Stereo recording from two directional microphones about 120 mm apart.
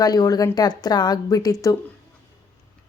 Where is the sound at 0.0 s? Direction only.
35° left (ahead or behind).